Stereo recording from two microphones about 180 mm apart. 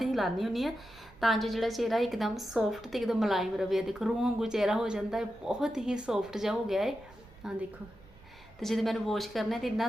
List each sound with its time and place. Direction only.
0.0 s a woman's voice: centre (ahead or behind)
8.6 s a woman's voice: centre (ahead or behind)